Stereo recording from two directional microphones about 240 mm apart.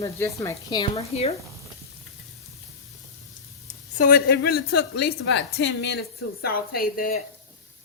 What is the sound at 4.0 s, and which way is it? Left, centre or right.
A woman's voice, left.